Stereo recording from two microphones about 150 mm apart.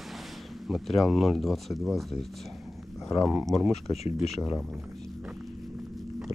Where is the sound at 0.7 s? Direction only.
Centre (ahead or behind).